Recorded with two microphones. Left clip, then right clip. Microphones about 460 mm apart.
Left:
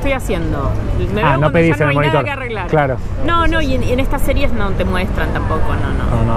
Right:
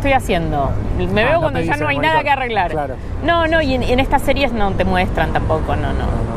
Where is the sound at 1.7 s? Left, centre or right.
Right.